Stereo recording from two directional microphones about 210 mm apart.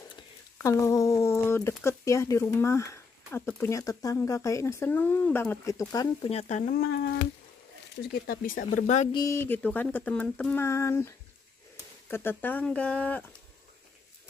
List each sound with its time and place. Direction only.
0.1 s speech: 15° left (ahead or behind)
6.3 s speech: 35° left (ahead or behind)
8.0 s speech: 45° left (ahead or behind)
8.7 s speech: 35° left (ahead or behind)
9.1 s speech: 15° left (ahead or behind)